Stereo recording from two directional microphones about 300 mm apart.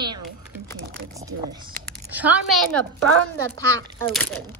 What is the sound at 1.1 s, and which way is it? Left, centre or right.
A woman's voice, centre.